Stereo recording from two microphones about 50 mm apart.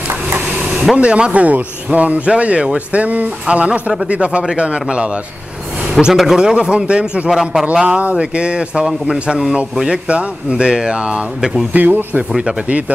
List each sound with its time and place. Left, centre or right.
0.3 s a sound: right
0.9 s a man's voice: right
6.1 s a man's voice: centre
6.4 s speech: centre
7.2 s speech: centre
7.7 s a man's voice: centre
11.7 s speech: right
12.3 s speech: centre